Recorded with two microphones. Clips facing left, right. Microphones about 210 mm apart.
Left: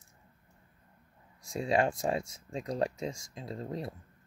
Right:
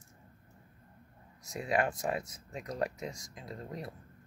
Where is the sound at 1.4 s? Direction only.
25° left (ahead or behind).